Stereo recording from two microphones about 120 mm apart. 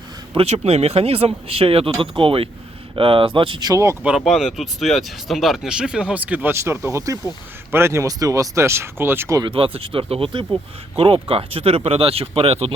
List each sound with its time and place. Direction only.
0.3 s speech: 60° right (ahead or behind); by 3.9 s 30° right (ahead or behind)
4.2 s speech: centre (ahead or behind); by 9.4 s 20° right (ahead or behind)
9.5 s speech: 50° right (ahead or behind)